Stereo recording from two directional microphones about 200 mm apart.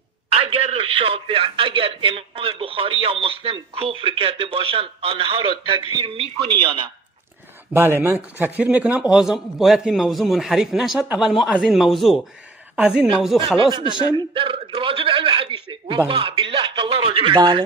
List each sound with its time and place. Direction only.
0.3 s speech: 30° right (ahead or behind)
7.7 s a man's voice: 10° right (ahead or behind)
13.7 s a man's voice: 25° right (ahead or behind)